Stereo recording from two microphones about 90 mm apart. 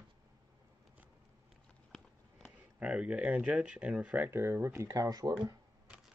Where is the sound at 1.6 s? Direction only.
5° left (ahead or behind).